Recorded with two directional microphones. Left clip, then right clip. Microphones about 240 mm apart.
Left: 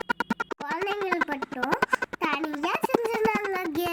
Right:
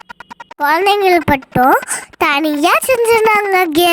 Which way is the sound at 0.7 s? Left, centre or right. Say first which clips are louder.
Right 18 dB; right.